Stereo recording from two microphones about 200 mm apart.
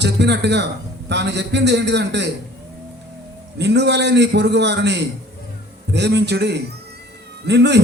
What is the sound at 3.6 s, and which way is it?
A man's voice, 60° right (ahead or behind).